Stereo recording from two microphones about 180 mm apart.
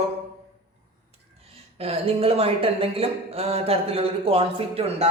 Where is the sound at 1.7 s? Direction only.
35° right (ahead or behind).